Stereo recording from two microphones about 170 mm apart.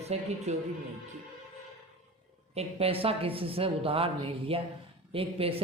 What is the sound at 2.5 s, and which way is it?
A woman's voice, 35° right (ahead or behind).